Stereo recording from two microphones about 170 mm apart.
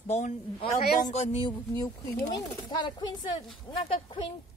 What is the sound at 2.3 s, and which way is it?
Speech, 25° left (ahead or behind).